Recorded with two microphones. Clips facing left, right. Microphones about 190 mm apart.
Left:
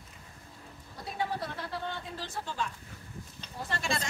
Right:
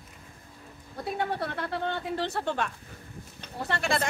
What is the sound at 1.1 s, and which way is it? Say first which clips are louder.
Speech: right 3 dB; 60° right (ahead or behind).